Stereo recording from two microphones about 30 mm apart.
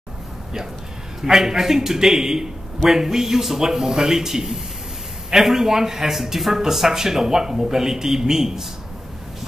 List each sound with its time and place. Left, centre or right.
1.2 s speech: centre